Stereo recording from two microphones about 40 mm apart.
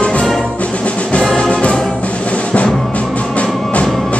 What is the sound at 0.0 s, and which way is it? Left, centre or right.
Music, left.